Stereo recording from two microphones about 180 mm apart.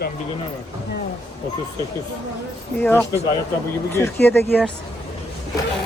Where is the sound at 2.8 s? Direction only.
10° left (ahead or behind).